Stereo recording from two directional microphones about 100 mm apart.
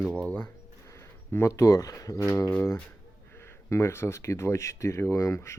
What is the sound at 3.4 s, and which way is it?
Speech, 25° left (ahead or behind).